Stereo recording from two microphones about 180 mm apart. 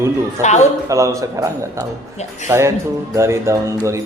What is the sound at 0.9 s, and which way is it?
Speech, 15° right (ahead or behind).